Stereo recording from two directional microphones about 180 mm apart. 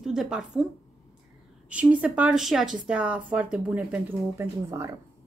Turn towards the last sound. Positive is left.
turn(degrees=-15)  # may be behind; listen again after turning